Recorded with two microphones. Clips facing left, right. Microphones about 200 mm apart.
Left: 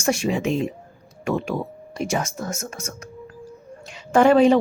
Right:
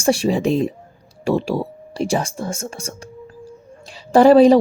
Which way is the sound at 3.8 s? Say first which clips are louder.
Right 5 dB; 35° right (ahead or behind).